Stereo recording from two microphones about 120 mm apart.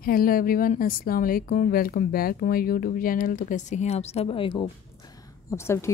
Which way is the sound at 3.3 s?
90° left.